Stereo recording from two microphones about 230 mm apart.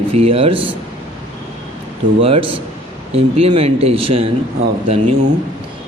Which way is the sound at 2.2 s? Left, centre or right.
Right.